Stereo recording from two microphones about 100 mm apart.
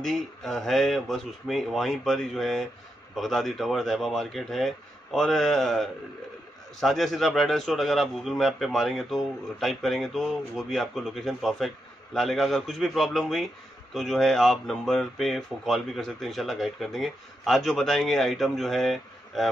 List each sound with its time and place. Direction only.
0.0 s a man's voice: centre (ahead or behind)